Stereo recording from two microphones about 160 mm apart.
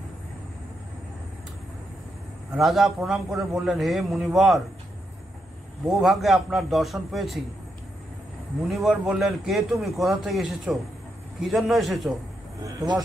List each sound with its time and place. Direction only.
2.5 s speech: centre (ahead or behind)
5.9 s speech: centre (ahead or behind)
8.6 s speech: centre (ahead or behind)
12.6 s speech: 25° right (ahead or behind)